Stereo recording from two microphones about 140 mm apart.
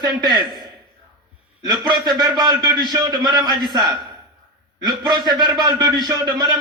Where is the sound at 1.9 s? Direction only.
30° right (ahead or behind).